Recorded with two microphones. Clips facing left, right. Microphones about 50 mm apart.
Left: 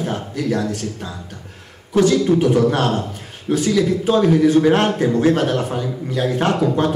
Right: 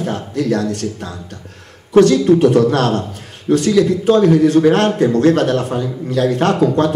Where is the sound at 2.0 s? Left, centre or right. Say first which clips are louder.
Right 5 dB; right.